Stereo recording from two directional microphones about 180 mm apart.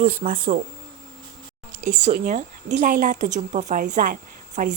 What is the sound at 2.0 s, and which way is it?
A woman's voice, 50° right (ahead or behind).